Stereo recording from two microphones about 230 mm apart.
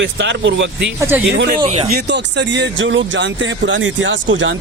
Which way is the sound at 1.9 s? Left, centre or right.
Right.